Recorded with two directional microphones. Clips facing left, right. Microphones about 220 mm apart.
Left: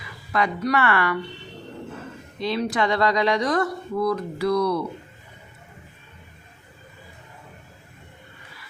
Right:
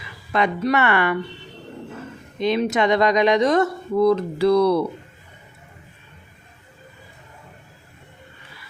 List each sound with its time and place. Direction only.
0.3 s speech: 25° right (ahead or behind)
2.4 s speech: 20° right (ahead or behind)